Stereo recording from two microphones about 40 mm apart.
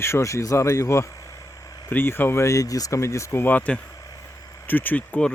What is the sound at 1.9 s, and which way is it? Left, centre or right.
Speech, left.